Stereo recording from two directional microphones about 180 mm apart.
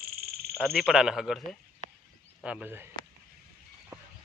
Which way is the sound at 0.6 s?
Centre (ahead or behind).